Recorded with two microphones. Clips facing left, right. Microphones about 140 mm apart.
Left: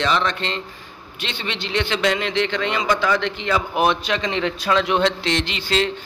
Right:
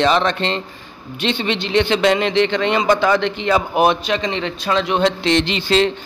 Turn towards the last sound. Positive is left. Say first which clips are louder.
# right 6 dB
turn(degrees=-25)  # may be behind; listen again after turning